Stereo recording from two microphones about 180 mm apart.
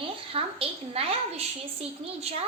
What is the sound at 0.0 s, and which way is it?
A child's voice, 30° right (ahead or behind).